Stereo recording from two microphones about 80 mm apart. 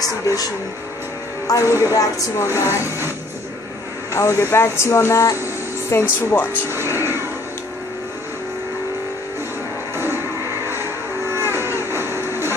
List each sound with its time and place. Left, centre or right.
0.0 s speech: left
1.5 s speech: left
2.5 s speech: right
4.1 s speech: left
6.5 s speech: right
11.3 s livestock: right